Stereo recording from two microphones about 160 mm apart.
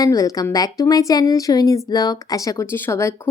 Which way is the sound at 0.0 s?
20° left (ahead or behind).